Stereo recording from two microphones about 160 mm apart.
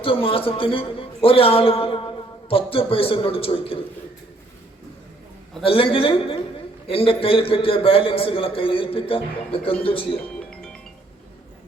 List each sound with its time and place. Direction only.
0.0 s a man's voice: 35° left (ahead or behind)
5.6 s a man's voice: 35° left (ahead or behind)